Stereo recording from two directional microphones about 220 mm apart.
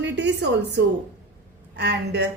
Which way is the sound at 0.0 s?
50° right (ahead or behind).